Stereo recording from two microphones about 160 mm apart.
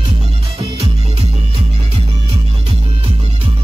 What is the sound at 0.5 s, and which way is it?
Music, 35° right (ahead or behind).